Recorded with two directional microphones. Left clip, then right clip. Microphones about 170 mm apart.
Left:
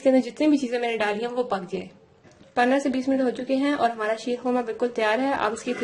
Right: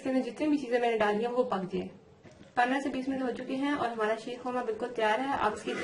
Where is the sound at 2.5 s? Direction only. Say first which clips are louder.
Left 7 dB; 45° left (ahead or behind).